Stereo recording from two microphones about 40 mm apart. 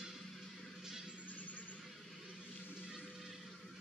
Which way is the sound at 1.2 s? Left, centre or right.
Left.